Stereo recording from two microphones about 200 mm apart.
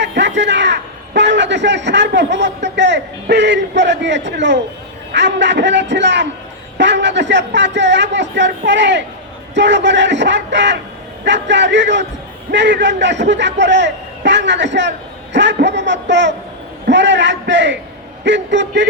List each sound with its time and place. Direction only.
0.0 s a man's voice: 60° right (ahead or behind)